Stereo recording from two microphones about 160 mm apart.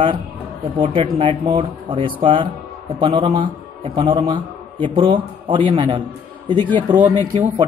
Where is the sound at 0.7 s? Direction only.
35° right (ahead or behind).